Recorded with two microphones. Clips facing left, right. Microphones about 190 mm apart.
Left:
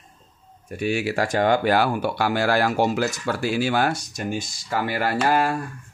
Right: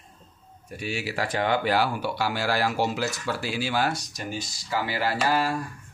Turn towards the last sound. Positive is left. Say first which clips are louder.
# left 4 dB
turn(degrees=55)  # may be behind; listen again after turning